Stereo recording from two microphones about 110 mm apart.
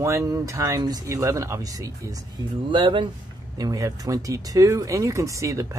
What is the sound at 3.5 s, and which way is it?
Speech, 30° right (ahead or behind).